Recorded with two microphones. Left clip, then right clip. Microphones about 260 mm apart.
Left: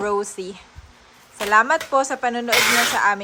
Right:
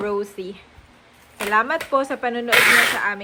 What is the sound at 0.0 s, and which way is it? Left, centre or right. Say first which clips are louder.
Speech: left 2 dB; centre.